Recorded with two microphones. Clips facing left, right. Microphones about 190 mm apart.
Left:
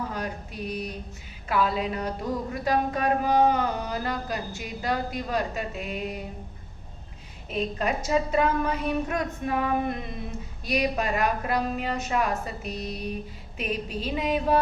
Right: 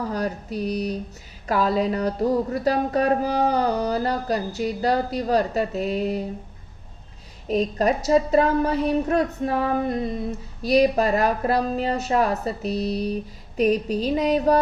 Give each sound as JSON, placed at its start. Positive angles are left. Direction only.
{"t": 0.1, "sound": "speech", "side_deg": -35}
{"t": 7.4, "sound": "speech", "side_deg": -40}